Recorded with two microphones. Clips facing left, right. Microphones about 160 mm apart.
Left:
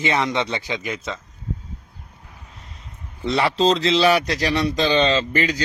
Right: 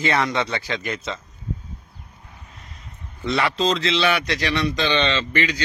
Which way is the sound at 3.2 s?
30° left (ahead or behind).